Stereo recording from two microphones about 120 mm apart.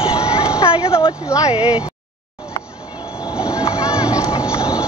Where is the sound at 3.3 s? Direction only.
10° right (ahead or behind).